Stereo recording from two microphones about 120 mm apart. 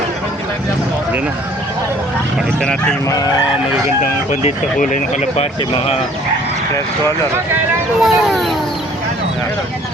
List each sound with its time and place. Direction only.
4.3 s speech: 80° left
8.0 s speech: centre (ahead or behind)